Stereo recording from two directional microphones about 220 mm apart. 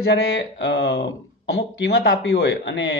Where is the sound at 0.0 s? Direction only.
50° left (ahead or behind).